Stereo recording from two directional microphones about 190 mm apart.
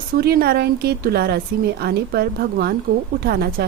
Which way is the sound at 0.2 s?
55° right (ahead or behind).